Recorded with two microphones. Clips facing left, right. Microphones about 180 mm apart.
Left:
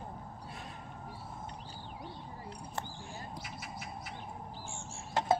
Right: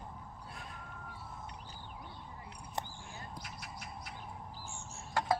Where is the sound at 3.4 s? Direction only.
5° left (ahead or behind).